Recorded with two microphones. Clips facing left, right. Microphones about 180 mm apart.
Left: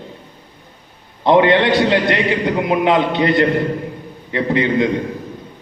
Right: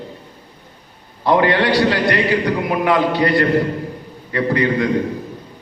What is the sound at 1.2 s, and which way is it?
A man's voice, 20° left (ahead or behind).